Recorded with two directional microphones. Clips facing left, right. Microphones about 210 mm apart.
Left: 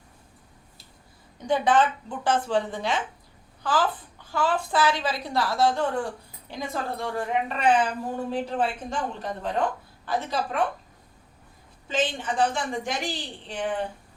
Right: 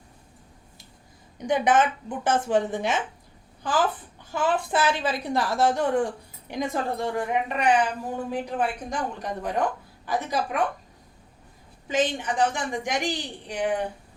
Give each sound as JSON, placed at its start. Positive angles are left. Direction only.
{"t": 1.5, "sound": "a woman's voice", "side_deg": -20}
{"t": 11.9, "sound": "a woman's voice", "side_deg": -15}